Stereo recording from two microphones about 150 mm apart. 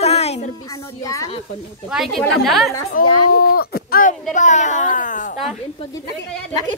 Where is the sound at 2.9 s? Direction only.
80° left; by 5.4 s 60° left (ahead or behind).